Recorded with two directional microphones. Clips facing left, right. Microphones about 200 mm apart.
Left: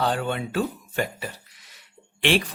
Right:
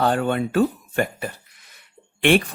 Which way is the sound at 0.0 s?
50° right (ahead or behind).